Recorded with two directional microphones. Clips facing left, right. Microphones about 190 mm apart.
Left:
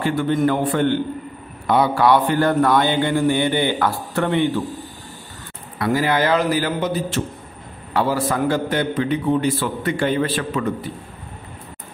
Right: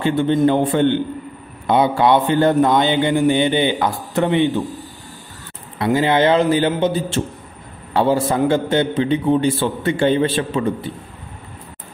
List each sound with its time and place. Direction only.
0.0 s a man's voice: 25° right (ahead or behind)
5.8 s a man's voice: 25° right (ahead or behind)